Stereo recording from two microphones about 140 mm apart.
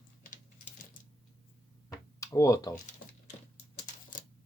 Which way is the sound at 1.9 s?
20° left (ahead or behind).